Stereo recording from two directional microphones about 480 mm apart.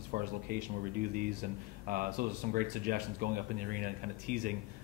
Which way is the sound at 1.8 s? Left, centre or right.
Centre.